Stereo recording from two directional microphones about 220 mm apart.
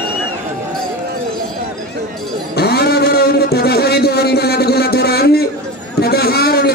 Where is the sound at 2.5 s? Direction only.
45° left (ahead or behind).